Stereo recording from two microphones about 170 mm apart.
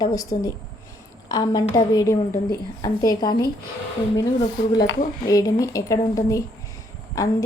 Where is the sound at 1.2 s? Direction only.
25° left (ahead or behind).